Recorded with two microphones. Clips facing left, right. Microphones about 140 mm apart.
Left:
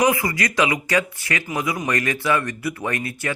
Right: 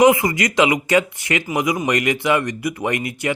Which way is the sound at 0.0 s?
25° right (ahead or behind).